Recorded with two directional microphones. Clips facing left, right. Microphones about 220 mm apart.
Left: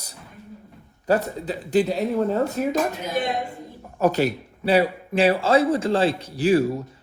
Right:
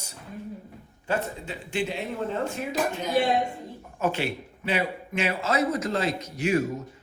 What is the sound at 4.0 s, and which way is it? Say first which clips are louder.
A man's voice: left 7 dB; 40° left (ahead or behind).